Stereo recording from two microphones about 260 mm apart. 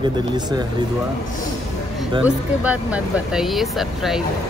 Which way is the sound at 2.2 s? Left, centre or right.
Centre.